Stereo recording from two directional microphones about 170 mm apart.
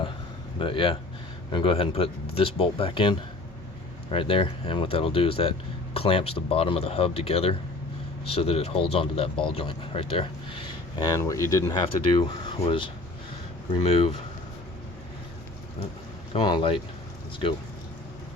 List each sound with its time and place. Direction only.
0.6 s speech: 30° left (ahead or behind)
10.9 s speech: 25° left (ahead or behind); by 14.2 s 40° left (ahead or behind)
16.3 s speech: 30° left (ahead or behind)